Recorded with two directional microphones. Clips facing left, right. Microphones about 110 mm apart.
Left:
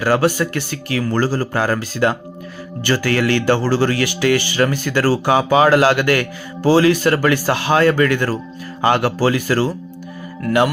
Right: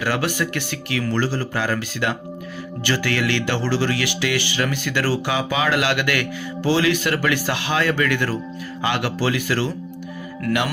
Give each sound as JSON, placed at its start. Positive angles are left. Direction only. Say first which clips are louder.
{"t": 0.0, "sound": "speech", "louder": "left 7 dB", "side_deg": 40}